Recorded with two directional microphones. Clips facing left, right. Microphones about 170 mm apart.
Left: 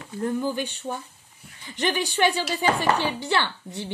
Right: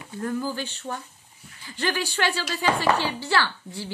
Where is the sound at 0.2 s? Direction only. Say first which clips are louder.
Left 3 dB; 20° left (ahead or behind).